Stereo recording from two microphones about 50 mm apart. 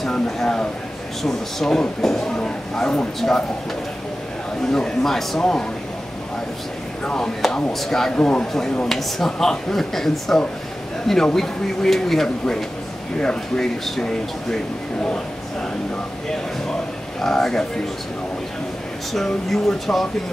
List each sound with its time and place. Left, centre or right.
0.0 s a sound: centre
1.2 s speech: centre
4.7 s speech: centre
7.4 s speech: centre
8.3 s speech: centre
8.8 s speech: centre
17.2 s speech: centre
19.1 s speech: centre